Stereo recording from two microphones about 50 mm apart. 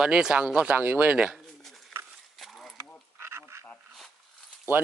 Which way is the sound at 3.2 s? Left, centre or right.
Right.